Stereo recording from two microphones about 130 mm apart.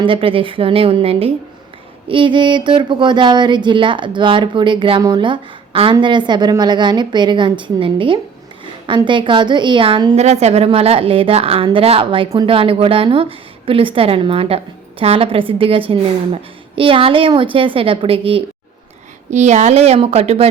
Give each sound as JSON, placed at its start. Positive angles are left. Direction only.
{"t": 0.0, "sound": "a woman's voice", "side_deg": -45}
{"t": 19.3, "sound": "a woman's voice", "side_deg": -65}